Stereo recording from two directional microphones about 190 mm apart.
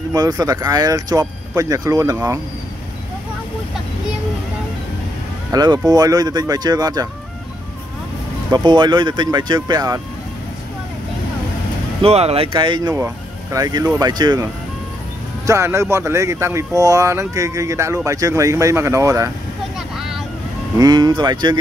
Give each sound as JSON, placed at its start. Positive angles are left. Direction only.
{"t": 0.1, "sound": "speech", "side_deg": -20}
{"t": 5.5, "sound": "speech", "side_deg": -20}
{"t": 8.5, "sound": "speech", "side_deg": -20}
{"t": 12.0, "sound": "speech", "side_deg": -35}
{"t": 20.7, "sound": "speech", "side_deg": -20}